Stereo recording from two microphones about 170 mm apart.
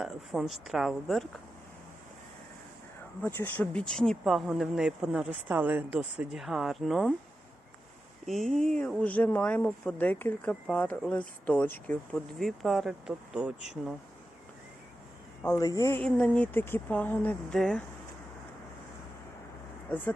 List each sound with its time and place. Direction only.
0.0 s speech: centre (ahead or behind)
3.2 s speech: 10° left (ahead or behind)
8.3 s speech: centre (ahead or behind)
15.4 s a man's voice: 20° left (ahead or behind)
16.0 s speech: 5° left (ahead or behind)